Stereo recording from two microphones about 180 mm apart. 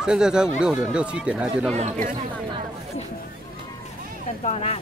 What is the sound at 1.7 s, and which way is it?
Speech, 45° right (ahead or behind).